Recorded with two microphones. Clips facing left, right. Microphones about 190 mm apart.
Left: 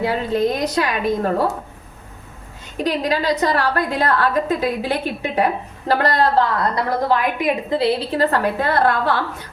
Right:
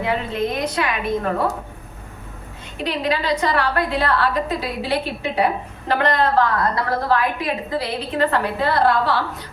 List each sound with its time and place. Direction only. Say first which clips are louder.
0.0 s a woman's voice: left 3 dB; 35° left (ahead or behind)
2.7 s a woman's voice: left 2 dB; 40° left (ahead or behind)
7.1 s a woman's voice: left 1 dB; 15° left (ahead or behind); by 9.2 s 50° left (ahead or behind)